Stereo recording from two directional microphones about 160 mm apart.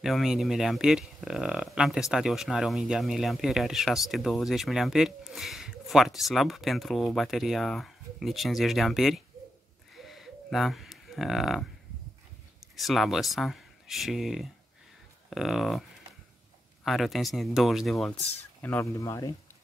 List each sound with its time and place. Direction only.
0.0 s speech: centre (ahead or behind)
9.9 s owl: centre (ahead or behind)
12.7 s speech: centre (ahead or behind)
16.8 s speech: centre (ahead or behind); by 19.3 s 20° left (ahead or behind)